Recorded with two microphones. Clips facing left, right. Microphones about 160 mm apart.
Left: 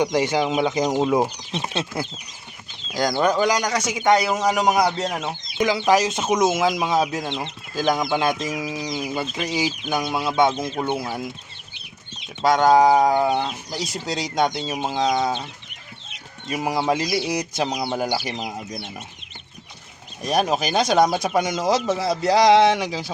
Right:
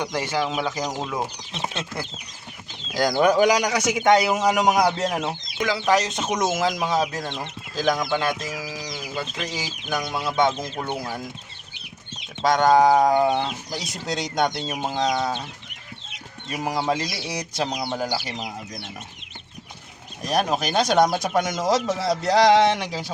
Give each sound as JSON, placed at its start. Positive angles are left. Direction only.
{"t": 0.0, "sound": "speech", "side_deg": 15}
{"t": 2.9, "sound": "a man's voice", "side_deg": 0}
{"t": 5.5, "sound": "speech", "side_deg": 20}
{"t": 7.3, "sound": "speech", "side_deg": 20}
{"t": 12.4, "sound": "speech", "side_deg": 5}
{"t": 16.5, "sound": "speech", "side_deg": 10}
{"t": 20.2, "sound": "speech", "side_deg": 5}